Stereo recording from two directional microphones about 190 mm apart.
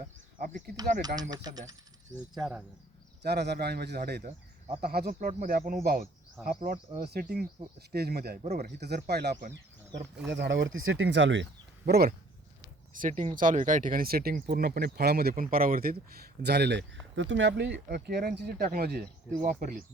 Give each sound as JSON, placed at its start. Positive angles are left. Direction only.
{"t": 0.3, "sound": "speech", "side_deg": -45}
{"t": 1.0, "sound": "speech", "side_deg": -20}
{"t": 2.3, "sound": "speech", "side_deg": -5}
{"t": 3.2, "sound": "speech", "side_deg": -60}
{"t": 11.9, "sound": "speech", "side_deg": -55}
{"t": 12.9, "sound": "speech", "side_deg": -45}